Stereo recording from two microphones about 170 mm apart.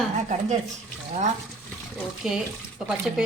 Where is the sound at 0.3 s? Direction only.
40° right (ahead or behind).